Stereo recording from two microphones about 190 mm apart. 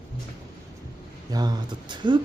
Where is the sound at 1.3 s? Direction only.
20° right (ahead or behind).